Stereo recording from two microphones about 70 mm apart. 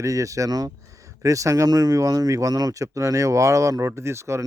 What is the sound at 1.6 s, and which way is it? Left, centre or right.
Speech, right.